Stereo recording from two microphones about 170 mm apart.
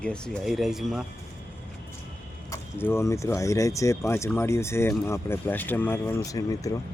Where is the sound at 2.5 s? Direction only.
15° left (ahead or behind).